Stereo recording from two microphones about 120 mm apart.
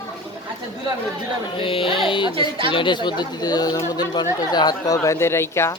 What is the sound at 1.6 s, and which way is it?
Speech, 50° left (ahead or behind).